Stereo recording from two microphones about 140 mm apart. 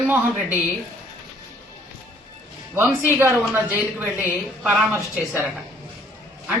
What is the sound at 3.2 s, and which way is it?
Speech, 15° right (ahead or behind).